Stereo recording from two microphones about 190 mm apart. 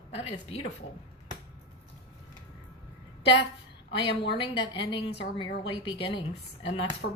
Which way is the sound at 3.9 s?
25° left (ahead or behind).